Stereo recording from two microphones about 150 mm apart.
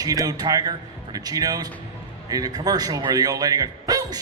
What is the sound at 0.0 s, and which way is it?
A man's voice, 25° right (ahead or behind).